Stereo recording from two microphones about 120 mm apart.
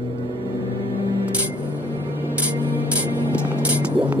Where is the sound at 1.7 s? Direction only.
15° right (ahead or behind).